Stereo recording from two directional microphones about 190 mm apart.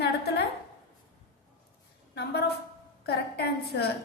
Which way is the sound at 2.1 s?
60° left (ahead or behind).